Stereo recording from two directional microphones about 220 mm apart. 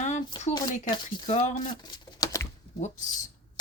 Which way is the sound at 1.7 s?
20° left (ahead or behind).